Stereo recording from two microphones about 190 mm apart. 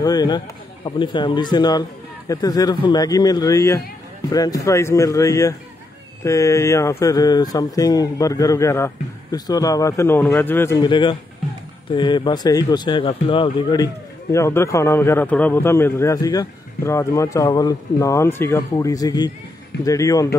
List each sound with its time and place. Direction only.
0.0 s a man's voice: 20° left (ahead or behind)
10.8 s a man's voice: 25° left (ahead or behind)